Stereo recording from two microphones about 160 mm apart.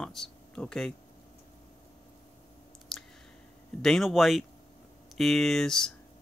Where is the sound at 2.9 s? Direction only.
Centre (ahead or behind).